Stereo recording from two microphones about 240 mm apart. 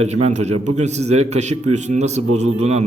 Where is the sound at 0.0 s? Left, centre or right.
Right.